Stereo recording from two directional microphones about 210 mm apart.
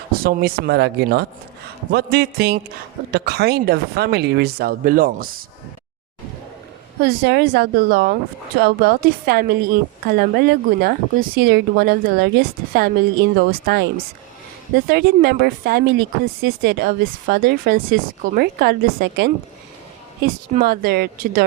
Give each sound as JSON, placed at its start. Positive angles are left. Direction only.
{"t": 0.2, "sound": "speech", "side_deg": -45}
{"t": 7.0, "sound": "speech", "side_deg": -45}
{"t": 14.8, "sound": "speech", "side_deg": -50}